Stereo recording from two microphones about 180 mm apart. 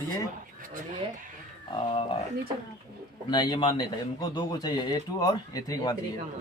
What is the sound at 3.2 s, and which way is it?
Speech, 25° left (ahead or behind).